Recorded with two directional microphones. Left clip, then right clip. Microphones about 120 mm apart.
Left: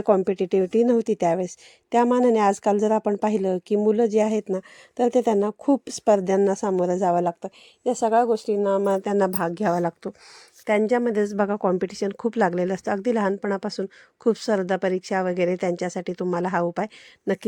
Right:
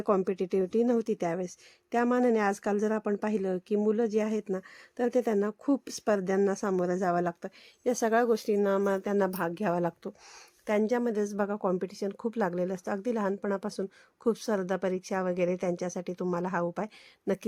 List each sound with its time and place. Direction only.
0.0 s a woman's voice: 35° left (ahead or behind)
7.9 s speech: 10° left (ahead or behind)
8.8 s a woman's voice: 35° left (ahead or behind)
13.3 s a woman's voice: 35° left (ahead or behind)